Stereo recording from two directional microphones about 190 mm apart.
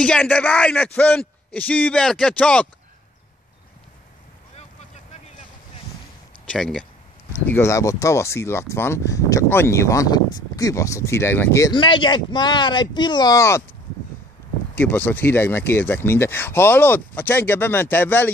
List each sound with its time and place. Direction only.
0.0 s speech: 5° left (ahead or behind)
6.4 s speech: 5° left (ahead or behind)
14.8 s speech: 10° left (ahead or behind)